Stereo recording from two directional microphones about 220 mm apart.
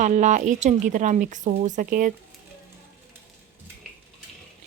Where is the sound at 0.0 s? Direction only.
35° right (ahead or behind).